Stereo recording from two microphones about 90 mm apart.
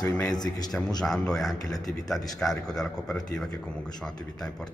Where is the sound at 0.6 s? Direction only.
5° left (ahead or behind).